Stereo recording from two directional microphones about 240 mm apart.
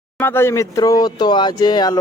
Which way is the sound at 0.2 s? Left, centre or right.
Centre.